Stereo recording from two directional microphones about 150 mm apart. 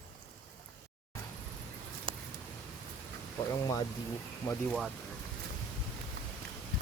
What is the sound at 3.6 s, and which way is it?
Speech, 25° left (ahead or behind).